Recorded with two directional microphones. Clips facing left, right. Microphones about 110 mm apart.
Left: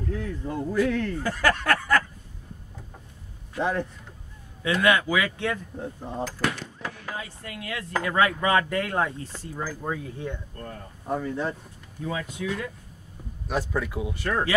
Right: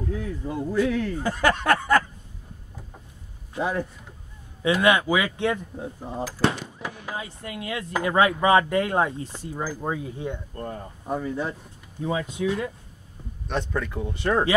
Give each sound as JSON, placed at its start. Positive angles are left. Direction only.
{"t": 0.1, "sound": "speech", "side_deg": -5}
{"t": 1.2, "sound": "speech", "side_deg": -20}
{"t": 3.5, "sound": "a man's voice", "side_deg": -10}
{"t": 4.6, "sound": "speech", "side_deg": -20}
{"t": 5.8, "sound": "cutlery", "side_deg": -5}
{"t": 6.6, "sound": "fireworks", "side_deg": -15}
{"t": 7.9, "sound": "speech", "side_deg": -20}
{"t": 11.1, "sound": "cutlery", "side_deg": -5}
{"t": 12.0, "sound": "speech", "side_deg": -25}
{"t": 13.5, "sound": "speech", "side_deg": 5}
{"t": 14.1, "sound": "speech", "side_deg": -20}